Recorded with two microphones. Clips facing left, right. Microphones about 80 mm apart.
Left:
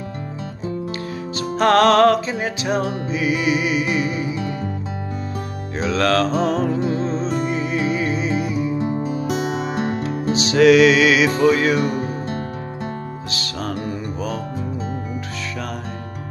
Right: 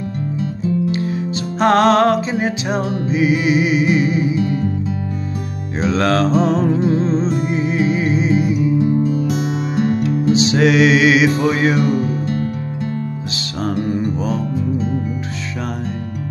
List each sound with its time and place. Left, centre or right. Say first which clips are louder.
0.9 s music: right 6 dB; centre
5.9 s music: right 2 dB; right
6.2 s music: right 4 dB; centre
7.4 s music: right 3 dB; right
8.7 s music: right 6 dB; left
10.3 s music: left 3 dB; right
11.8 s music: right 4 dB; left